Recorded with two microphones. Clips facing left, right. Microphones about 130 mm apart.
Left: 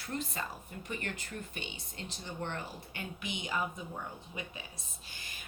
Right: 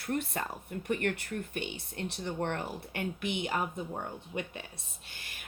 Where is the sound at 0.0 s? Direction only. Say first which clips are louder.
Right 5 dB; 60° right (ahead or behind).